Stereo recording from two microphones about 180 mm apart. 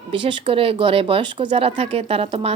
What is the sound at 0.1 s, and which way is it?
Speech, 30° right (ahead or behind).